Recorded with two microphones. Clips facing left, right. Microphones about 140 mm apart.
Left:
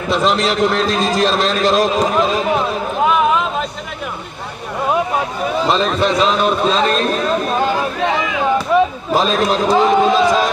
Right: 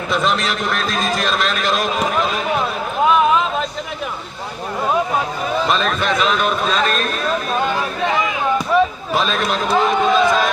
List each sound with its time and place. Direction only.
0.1 s speech: 30° left (ahead or behind)
5.6 s a man's voice: 30° left (ahead or behind)
9.1 s speech: 35° left (ahead or behind)